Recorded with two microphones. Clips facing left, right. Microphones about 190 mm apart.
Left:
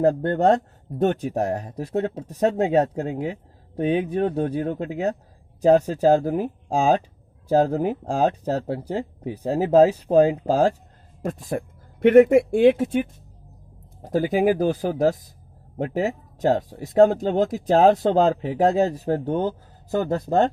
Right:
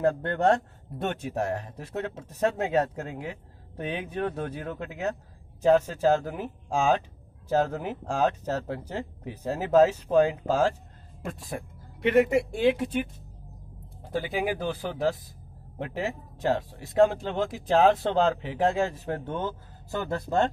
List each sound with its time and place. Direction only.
0.0 s speech: 40° left (ahead or behind)